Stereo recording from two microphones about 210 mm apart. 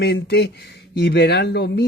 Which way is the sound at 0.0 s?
50° left (ahead or behind).